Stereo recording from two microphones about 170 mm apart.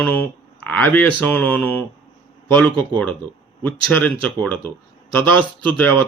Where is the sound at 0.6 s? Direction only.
5° left (ahead or behind).